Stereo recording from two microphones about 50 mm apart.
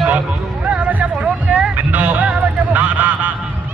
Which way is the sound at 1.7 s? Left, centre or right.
Right.